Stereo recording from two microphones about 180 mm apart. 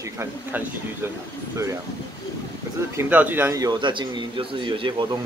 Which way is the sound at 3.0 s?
10° right (ahead or behind).